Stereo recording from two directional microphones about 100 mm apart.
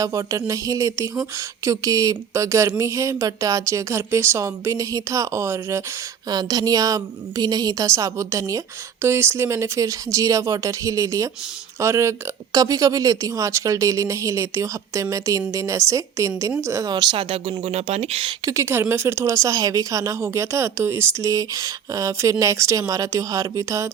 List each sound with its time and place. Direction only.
0.0 s speech: 30° right (ahead or behind)
6.2 s speech: 40° right (ahead or behind)
16.9 s speech: 45° right (ahead or behind)
17.2 s speech: 70° right (ahead or behind)
17.6 s speech: 90° right; by 18.3 s 75° right (ahead or behind)
18.4 s speech: 30° right (ahead or behind)